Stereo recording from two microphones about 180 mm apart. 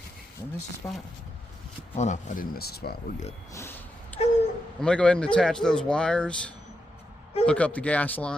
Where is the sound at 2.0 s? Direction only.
45° left (ahead or behind); by 2.9 s 60° left (ahead or behind).